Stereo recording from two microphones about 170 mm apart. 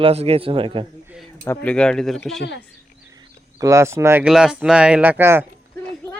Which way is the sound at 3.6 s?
15° right (ahead or behind).